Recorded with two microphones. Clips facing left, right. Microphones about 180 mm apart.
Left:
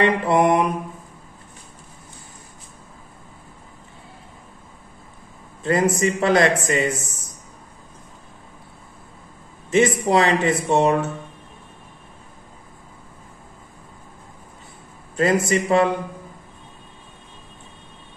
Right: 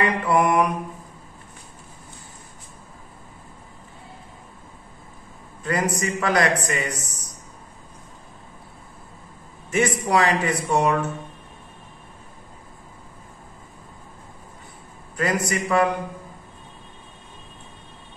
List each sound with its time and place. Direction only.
0.0 s speech: 25° left (ahead or behind)
5.6 s speech: 25° left (ahead or behind)
9.7 s speech: 25° left (ahead or behind)
15.1 s speech: 25° left (ahead or behind)